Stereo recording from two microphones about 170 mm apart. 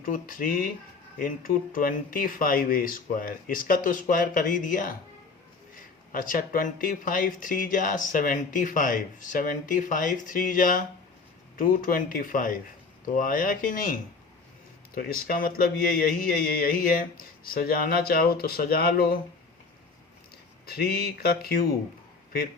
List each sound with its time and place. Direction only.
0.0 s speech: 55° left (ahead or behind)
14.9 s speech: 55° left (ahead or behind)
20.7 s speech: 65° left (ahead or behind)